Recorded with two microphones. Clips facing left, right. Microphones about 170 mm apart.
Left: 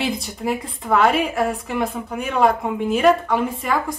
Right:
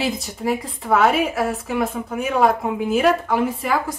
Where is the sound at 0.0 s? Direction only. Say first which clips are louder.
Even; centre (ahead or behind).